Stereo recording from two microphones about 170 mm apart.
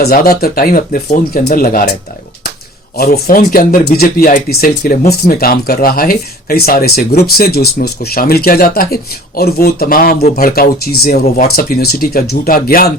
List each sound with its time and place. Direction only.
0.0 s speech: 65° left (ahead or behind)
3.1 s speech: 55° left (ahead or behind)